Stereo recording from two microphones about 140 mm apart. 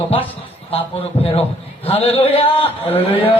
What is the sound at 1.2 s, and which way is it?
A man's voice, 45° left (ahead or behind).